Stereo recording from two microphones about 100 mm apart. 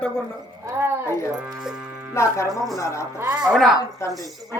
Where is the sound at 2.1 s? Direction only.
30° left (ahead or behind).